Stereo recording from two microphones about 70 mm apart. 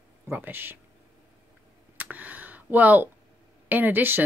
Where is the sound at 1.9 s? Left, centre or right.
Right.